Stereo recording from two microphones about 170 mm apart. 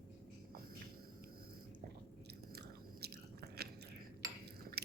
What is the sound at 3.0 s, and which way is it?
Biting, 70° right (ahead or behind).